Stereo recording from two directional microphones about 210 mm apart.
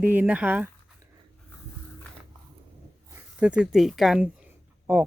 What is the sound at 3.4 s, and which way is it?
Speech, 5° right (ahead or behind).